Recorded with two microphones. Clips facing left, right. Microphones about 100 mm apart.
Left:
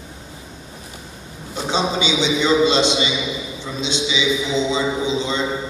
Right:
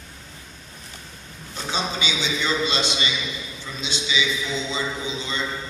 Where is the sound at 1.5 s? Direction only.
25° left (ahead or behind).